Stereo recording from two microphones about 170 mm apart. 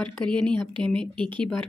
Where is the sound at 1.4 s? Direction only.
5° left (ahead or behind).